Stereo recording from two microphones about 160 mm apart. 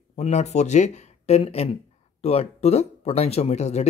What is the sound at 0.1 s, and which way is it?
Speech, 45° left (ahead or behind).